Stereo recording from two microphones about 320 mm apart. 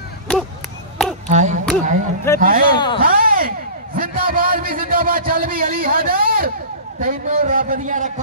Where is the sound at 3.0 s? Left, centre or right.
Right.